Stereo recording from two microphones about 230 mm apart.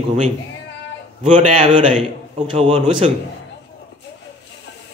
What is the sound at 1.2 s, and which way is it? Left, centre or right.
Speech, right.